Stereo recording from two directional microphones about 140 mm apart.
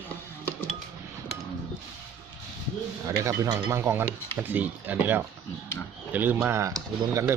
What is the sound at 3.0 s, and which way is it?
Speech, 20° right (ahead or behind).